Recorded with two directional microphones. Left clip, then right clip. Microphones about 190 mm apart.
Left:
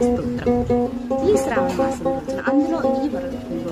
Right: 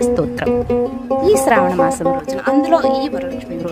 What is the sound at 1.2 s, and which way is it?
Speech, 30° right (ahead or behind).